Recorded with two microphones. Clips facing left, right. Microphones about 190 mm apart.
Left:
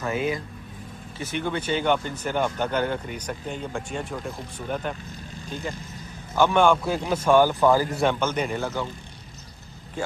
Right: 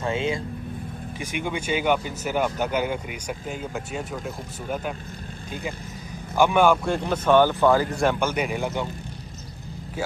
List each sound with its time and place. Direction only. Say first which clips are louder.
0.0 s speech: right 1 dB; 25° right (ahead or behind)
1.2 s speech: left 1 dB; 10° right (ahead or behind)
6.9 s speech: even; 10° left (ahead or behind)
8.0 s speech: right 1 dB; 10° right (ahead or behind)